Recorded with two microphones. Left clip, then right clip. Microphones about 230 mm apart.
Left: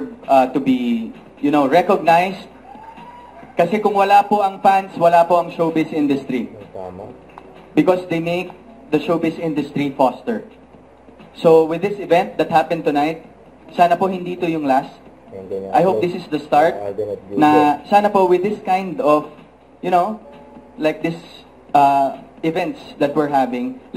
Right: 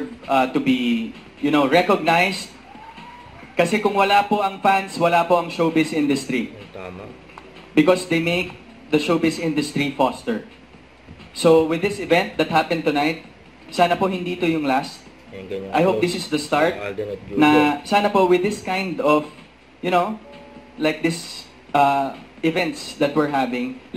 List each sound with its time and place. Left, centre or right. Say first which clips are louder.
0.2 s speech: left 5 dB; centre
3.5 s speech: left 3 dB; centre
7.7 s speech: left 1 dB; centre
21.7 s speech: left 4 dB; centre